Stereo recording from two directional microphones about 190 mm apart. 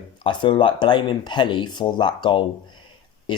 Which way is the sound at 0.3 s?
25° left (ahead or behind).